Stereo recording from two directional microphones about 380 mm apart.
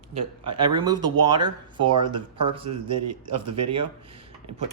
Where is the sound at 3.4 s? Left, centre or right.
Right.